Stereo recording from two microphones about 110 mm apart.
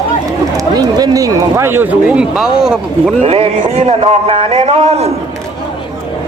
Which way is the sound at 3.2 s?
65° right (ahead or behind).